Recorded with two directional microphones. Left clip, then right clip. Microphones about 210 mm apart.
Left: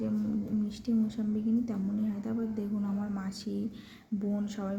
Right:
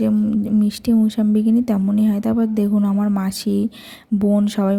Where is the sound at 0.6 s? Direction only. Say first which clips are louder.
Right 14 dB; 45° right (ahead or behind).